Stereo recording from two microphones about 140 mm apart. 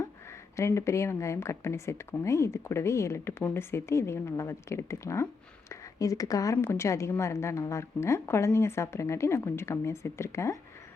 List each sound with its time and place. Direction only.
0.5 s speech: 20° left (ahead or behind)